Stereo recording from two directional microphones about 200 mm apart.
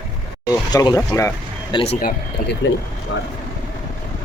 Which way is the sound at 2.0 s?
50° left (ahead or behind).